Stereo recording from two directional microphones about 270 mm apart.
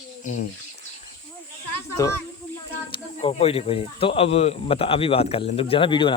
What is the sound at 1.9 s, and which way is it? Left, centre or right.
Speech, centre.